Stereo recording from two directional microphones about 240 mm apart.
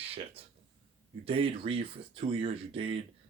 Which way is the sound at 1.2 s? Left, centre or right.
Right.